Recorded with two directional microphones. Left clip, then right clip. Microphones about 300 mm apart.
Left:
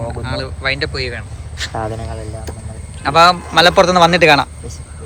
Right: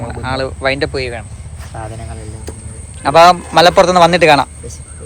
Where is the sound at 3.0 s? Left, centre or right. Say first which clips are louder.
Right 3 dB; centre.